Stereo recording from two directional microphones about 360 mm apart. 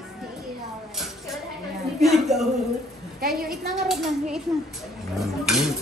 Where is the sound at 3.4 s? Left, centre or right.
Centre.